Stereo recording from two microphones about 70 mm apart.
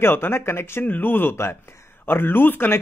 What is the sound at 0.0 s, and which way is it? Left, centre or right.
Speech, left.